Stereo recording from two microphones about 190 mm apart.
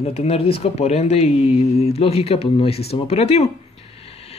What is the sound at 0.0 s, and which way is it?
Speech, 35° left (ahead or behind).